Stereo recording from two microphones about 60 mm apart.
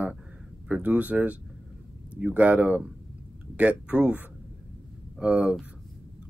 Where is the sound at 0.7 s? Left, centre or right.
Right.